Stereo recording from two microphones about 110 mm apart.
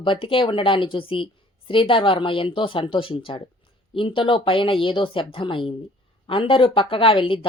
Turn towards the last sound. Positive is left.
turn(degrees=55)  # may be behind; listen again after turning